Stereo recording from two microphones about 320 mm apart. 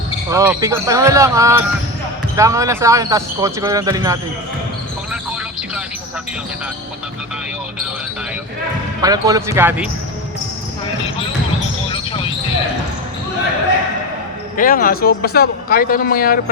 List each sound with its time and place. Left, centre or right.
0.3 s speech: centre
9.0 s speech: centre
14.5 s speech: left